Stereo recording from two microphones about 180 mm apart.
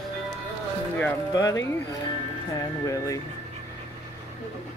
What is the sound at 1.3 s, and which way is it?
Speech, 20° left (ahead or behind).